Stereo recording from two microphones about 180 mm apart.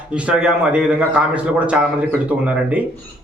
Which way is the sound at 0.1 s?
5° right (ahead or behind).